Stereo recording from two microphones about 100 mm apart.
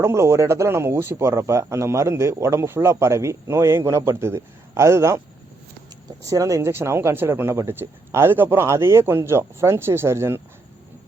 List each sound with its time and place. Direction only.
0.0 s a man's voice: 25° right (ahead or behind)
6.2 s speech: 35° right (ahead or behind)